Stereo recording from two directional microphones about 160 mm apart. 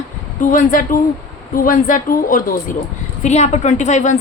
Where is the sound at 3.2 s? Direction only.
45° left (ahead or behind).